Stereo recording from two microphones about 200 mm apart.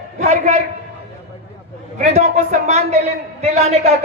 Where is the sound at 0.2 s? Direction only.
35° right (ahead or behind).